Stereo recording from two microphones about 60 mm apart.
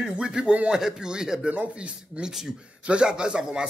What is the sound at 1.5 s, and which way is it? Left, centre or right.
A man's voice, right.